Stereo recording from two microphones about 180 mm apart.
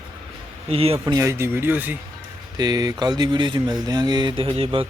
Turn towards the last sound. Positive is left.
turn(degrees=-30)  # may be behind; listen again after turning